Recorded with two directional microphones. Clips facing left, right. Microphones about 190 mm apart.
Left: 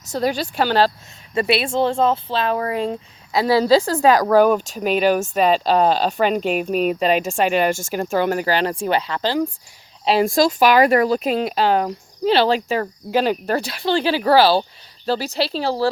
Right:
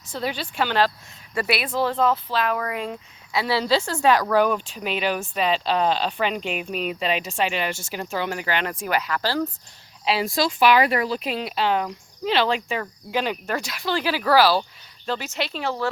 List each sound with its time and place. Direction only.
0.1 s a woman's voice: 40° left (ahead or behind); by 9.5 s 20° left (ahead or behind)
10.1 s speech: 45° left (ahead or behind)